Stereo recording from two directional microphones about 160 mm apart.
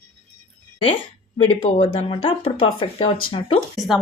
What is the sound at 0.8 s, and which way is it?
Speech, 35° left (ahead or behind).